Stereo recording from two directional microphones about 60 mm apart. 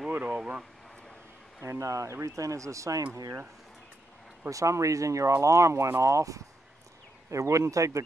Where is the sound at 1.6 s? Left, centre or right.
Right.